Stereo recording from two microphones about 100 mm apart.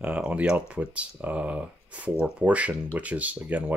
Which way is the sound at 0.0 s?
15° right (ahead or behind).